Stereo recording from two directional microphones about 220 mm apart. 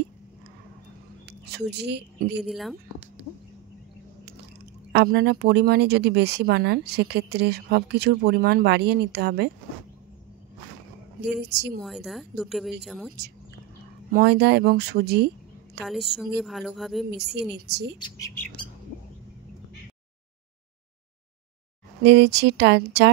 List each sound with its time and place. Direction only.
1.2 s speech: 50° right (ahead or behind)
2.4 s a woman's voice: centre (ahead or behind)
4.9 s speech: 50° right (ahead or behind)
11.4 s speech: 50° right (ahead or behind)
11.8 s a woman's voice: centre (ahead or behind)
14.1 s a woman's voice: 50° right (ahead or behind)
15.8 s a woman's voice: centre (ahead or behind)
17.6 s speech: 50° right (ahead or behind)
17.9 s speech: 20° left (ahead or behind)
22.0 s speech: 50° right (ahead or behind)